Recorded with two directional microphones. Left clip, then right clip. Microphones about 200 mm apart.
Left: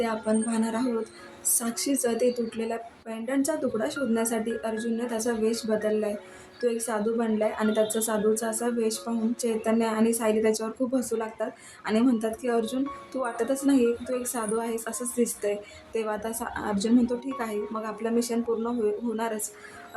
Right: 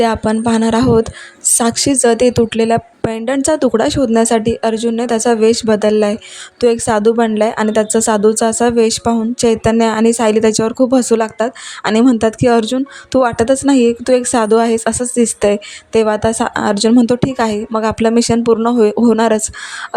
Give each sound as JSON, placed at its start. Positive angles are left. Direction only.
{"t": 0.0, "sound": "speech", "side_deg": -50}